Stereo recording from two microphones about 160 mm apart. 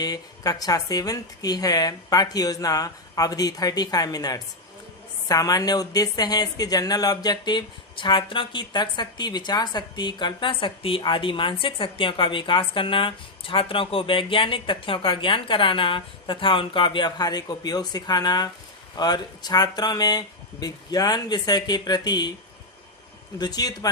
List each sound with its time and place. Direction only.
0.0 s speech: 25° left (ahead or behind)
23.4 s speech: 25° left (ahead or behind)